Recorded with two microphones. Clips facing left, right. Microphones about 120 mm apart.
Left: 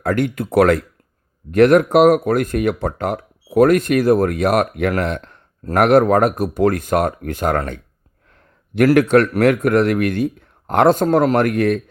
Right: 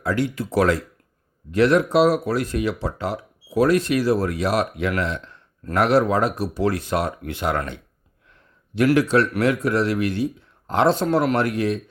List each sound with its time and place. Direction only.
0.0 s speech: 55° left (ahead or behind)
9.0 s speech: 55° left (ahead or behind)